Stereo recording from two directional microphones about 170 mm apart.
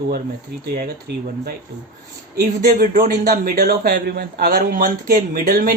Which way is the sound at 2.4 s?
55° right (ahead or behind).